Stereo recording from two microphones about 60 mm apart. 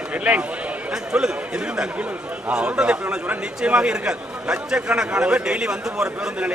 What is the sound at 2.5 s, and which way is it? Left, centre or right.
A man's voice, centre.